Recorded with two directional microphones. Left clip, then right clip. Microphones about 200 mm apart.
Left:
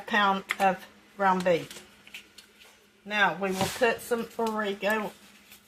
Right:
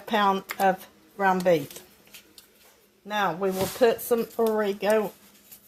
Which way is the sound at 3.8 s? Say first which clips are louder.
Right 6 dB; 60° right (ahead or behind).